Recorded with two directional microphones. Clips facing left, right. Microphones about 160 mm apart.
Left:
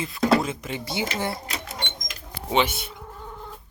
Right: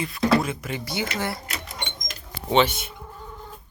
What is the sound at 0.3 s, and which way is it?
Speech, 20° left (ahead or behind).